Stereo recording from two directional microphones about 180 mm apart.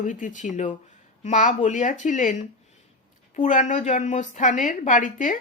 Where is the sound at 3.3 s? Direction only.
45° left (ahead or behind).